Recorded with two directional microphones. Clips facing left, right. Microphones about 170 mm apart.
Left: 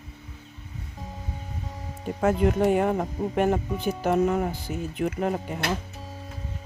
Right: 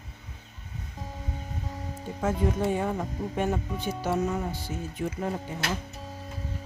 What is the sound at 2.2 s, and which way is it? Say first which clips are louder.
Speech: left 5 dB; 70° left (ahead or behind).